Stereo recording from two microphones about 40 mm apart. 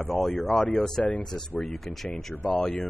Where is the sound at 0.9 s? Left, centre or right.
Centre.